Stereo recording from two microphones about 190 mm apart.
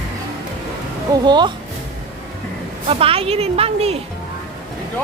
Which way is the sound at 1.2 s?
20° right (ahead or behind).